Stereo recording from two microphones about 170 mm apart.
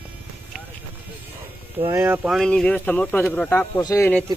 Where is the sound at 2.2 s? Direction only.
Centre (ahead or behind); by 4.1 s 20° left (ahead or behind).